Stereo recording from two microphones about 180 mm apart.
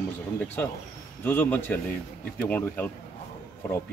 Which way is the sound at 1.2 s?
10° left (ahead or behind).